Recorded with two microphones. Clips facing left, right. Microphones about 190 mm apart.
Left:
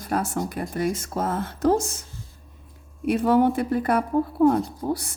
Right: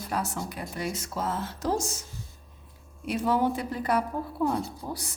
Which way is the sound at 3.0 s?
55° left (ahead or behind).